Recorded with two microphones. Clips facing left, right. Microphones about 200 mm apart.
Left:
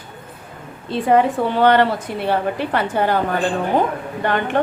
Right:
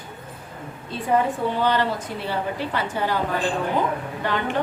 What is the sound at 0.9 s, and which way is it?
A woman's voice, 75° left (ahead or behind).